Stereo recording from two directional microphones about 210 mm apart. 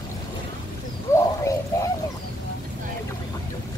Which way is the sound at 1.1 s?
15° left (ahead or behind).